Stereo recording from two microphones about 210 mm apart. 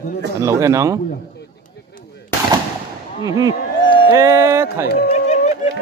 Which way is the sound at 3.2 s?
20° right (ahead or behind).